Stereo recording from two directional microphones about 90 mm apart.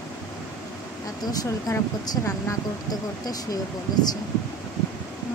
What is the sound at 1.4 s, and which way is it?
Speech, 40° left (ahead or behind).